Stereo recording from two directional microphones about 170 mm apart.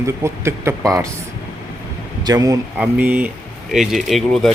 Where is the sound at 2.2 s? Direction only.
20° right (ahead or behind).